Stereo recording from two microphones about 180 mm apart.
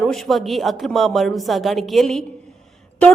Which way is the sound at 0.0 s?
Centre (ahead or behind).